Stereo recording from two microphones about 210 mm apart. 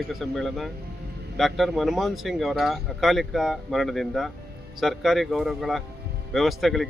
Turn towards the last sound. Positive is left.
turn(degrees=0)  # may be behind; listen again after turning